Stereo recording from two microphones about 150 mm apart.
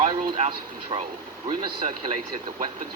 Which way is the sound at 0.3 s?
45° right (ahead or behind).